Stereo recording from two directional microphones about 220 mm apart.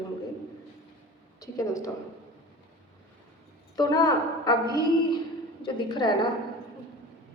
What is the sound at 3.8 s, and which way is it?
Speech, 15° left (ahead or behind).